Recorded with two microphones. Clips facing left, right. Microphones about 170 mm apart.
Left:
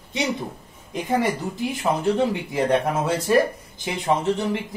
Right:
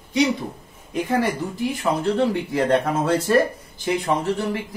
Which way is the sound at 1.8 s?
15° left (ahead or behind).